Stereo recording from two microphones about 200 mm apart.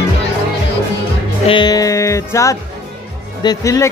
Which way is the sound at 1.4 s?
20° left (ahead or behind).